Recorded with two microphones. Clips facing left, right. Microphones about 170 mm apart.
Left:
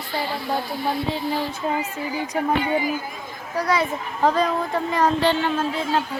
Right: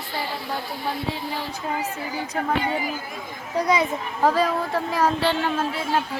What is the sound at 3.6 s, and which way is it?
Speech, 15° right (ahead or behind).